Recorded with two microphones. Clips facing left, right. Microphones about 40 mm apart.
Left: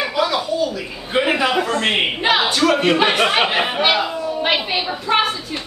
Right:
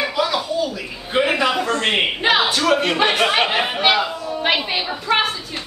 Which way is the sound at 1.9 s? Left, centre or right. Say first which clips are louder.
Right 2 dB; centre.